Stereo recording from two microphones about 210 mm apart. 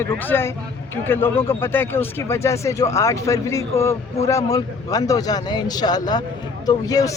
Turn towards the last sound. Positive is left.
turn(degrees=15)  # may be behind; listen again after turning